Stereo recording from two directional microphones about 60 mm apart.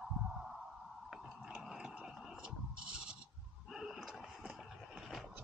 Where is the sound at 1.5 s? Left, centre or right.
Centre.